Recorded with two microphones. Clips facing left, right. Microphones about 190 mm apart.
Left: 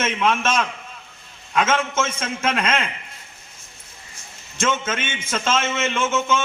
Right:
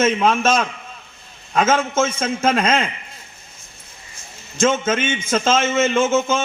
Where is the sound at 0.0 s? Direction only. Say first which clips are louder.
Right 5 dB; 40° right (ahead or behind).